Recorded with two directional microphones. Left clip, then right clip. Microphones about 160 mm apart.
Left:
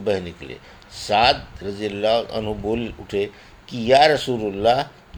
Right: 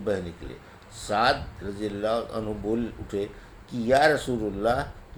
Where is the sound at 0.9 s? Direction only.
35° left (ahead or behind).